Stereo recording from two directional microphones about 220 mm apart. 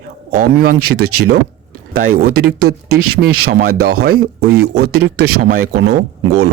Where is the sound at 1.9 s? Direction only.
40° right (ahead or behind).